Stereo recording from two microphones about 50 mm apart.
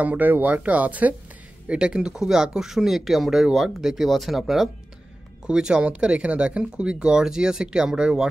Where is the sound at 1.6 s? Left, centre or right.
Centre.